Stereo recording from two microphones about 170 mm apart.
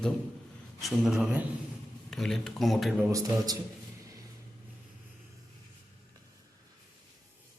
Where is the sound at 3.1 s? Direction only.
20° right (ahead or behind).